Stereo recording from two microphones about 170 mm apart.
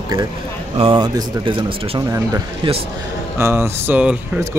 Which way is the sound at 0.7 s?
30° right (ahead or behind).